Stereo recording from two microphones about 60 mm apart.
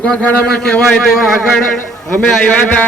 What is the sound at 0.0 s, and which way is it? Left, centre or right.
A man's voice, centre.